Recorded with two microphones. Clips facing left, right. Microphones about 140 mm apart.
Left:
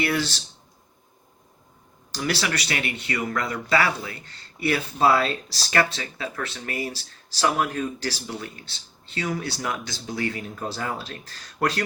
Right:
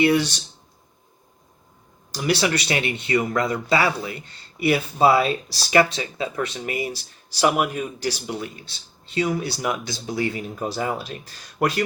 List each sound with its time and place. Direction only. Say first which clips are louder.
0.0 s speech: right 6 dB; 20° right (ahead or behind)
2.1 s speech: right 5 dB; 15° right (ahead or behind)